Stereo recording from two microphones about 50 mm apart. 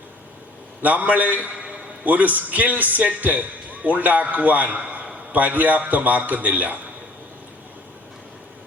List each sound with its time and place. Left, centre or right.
0.8 s a man's voice: right